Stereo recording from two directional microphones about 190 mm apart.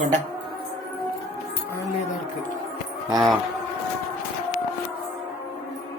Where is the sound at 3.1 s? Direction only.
20° right (ahead or behind).